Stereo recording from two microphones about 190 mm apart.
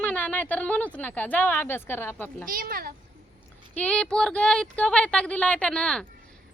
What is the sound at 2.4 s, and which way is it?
Speech, 50° right (ahead or behind).